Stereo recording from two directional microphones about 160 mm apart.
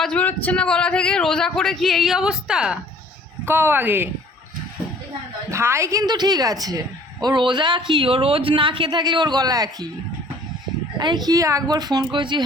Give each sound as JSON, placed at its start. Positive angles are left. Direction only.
{"t": 0.0, "sound": "speech", "side_deg": 10}
{"t": 5.5, "sound": "a woman's voice", "side_deg": -15}
{"t": 10.9, "sound": "a woman's voice", "side_deg": -25}